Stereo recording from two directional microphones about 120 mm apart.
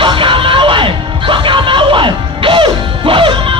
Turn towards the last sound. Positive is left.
turn(degrees=-45)  # may be behind; listen again after turning